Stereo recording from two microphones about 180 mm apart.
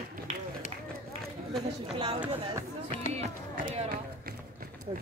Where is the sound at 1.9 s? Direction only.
25° right (ahead or behind).